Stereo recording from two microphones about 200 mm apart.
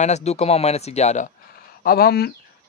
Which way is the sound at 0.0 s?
35° left (ahead or behind).